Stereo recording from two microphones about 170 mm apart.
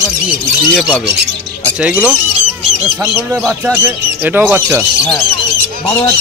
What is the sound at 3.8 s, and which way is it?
Speech, 10° right (ahead or behind).